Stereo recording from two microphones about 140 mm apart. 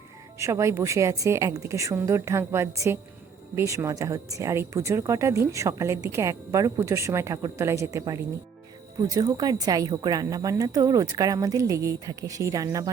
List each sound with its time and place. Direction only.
0.3 s speech: 20° right (ahead or behind)